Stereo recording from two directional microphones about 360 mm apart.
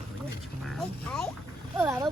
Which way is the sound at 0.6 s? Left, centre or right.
Centre.